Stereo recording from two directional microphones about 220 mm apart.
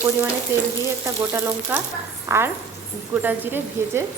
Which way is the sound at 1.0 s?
10° right (ahead or behind).